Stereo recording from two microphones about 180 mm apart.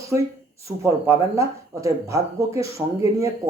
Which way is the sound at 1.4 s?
15° right (ahead or behind).